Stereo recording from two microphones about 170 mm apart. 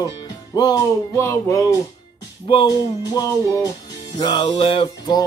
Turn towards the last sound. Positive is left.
turn(degrees=25)  # may be behind; listen again after turning